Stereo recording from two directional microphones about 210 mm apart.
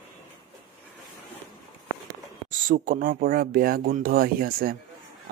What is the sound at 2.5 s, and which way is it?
Speech, 40° right (ahead or behind).